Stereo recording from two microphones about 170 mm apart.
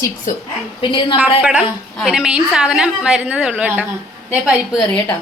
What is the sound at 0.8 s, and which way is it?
Speech, 30° left (ahead or behind).